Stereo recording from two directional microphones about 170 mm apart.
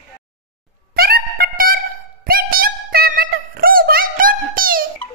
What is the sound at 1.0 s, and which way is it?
Music, 60° right (ahead or behind).